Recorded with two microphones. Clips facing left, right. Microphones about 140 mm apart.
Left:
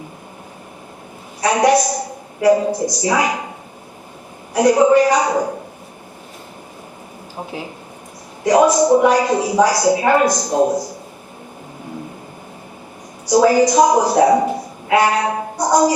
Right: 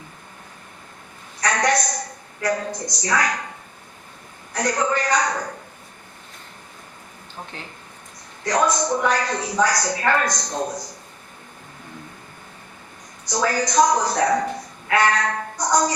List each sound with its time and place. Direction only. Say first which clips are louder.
1.4 s a woman's voice: left 7 dB; 15° left (ahead or behind)
2.5 s a woman's voice: left 11 dB; 25° left (ahead or behind)
2.8 s a woman's voice: left 6 dB; 10° left (ahead or behind)
4.5 s a woman's voice: left 11 dB; 15° left (ahead or behind)
7.3 s a woman's voice: left 8 dB; 10° left (ahead or behind)
10.6 s a man's voice: left 13 dB; 30° left (ahead or behind)
13.5 s a woman's voice: left 6 dB; 10° left (ahead or behind)
15.5 s a woman's voice: left 5 dB; 30° left (ahead or behind)